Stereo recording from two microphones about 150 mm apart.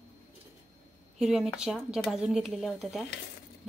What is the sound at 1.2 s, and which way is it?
Speech, 5° right (ahead or behind).